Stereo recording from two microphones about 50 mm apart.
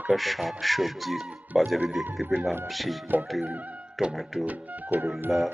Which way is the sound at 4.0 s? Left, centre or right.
Centre.